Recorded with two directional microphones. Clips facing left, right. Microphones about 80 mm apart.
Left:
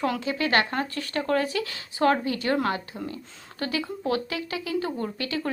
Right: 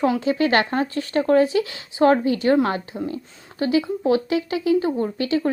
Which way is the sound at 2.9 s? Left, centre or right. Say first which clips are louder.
Right 7 dB; centre.